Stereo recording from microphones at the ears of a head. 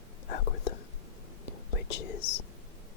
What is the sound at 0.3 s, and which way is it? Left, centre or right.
Whispering, left.